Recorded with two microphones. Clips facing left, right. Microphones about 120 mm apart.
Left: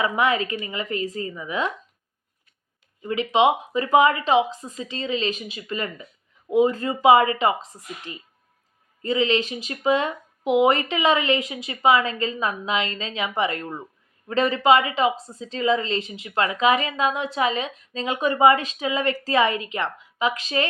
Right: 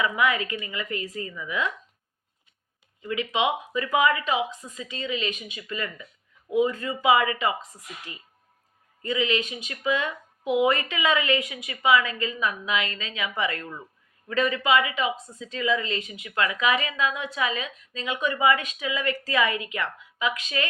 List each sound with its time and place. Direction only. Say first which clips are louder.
0.0 s speech: left 3 dB; 30° left (ahead or behind)
3.0 s a woman's voice: left 6 dB; 30° left (ahead or behind)